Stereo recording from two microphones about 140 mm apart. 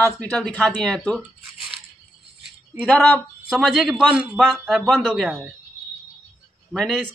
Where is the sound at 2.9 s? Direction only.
10° left (ahead or behind).